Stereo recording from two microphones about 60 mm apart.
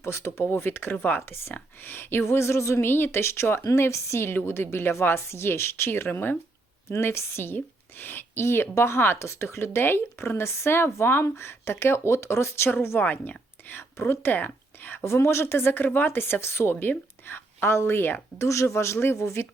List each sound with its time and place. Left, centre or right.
0.0 s a woman's voice: left
13.0 s speech: left
13.9 s speech: left
14.3 s speech: left
15.0 s a woman's voice: left
18.4 s a woman's voice: left